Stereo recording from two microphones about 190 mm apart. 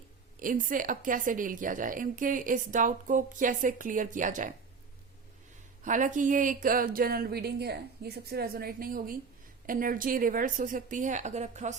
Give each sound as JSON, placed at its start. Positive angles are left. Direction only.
{"t": 0.3, "sound": "a woman's voice", "side_deg": -45}
{"t": 5.8, "sound": "a woman's voice", "side_deg": -40}